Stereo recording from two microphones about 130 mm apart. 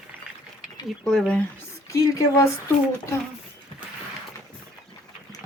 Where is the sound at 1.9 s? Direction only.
25° left (ahead or behind).